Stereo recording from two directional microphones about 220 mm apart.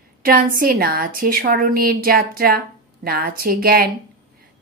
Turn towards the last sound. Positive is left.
turn(degrees=-45)  # may be behind; listen again after turning